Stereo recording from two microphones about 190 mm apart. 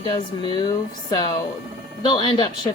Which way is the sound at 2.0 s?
25° left (ahead or behind).